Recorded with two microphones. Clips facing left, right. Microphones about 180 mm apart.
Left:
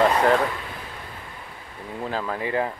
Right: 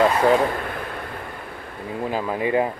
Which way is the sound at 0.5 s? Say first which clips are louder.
Right 6 dB; 60° right (ahead or behind).